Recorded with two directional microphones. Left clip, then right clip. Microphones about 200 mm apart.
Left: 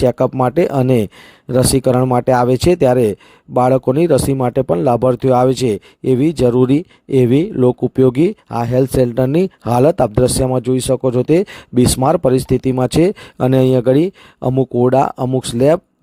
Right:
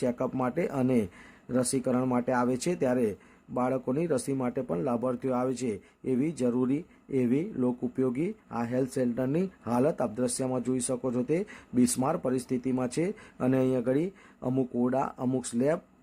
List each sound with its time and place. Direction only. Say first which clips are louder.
0.0 s speech: left 16 dB; 45° left (ahead or behind)